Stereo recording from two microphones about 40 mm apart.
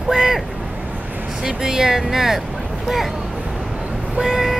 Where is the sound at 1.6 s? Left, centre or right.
Centre.